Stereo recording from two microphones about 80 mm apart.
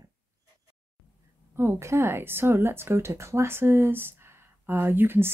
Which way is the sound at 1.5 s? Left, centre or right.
Right.